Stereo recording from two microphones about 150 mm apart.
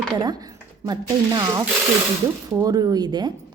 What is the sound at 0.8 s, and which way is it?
Speech, 25° right (ahead or behind).